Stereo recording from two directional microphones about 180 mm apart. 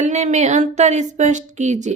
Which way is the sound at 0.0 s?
40° right (ahead or behind).